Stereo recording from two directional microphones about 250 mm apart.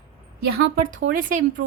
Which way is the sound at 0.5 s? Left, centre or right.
Right.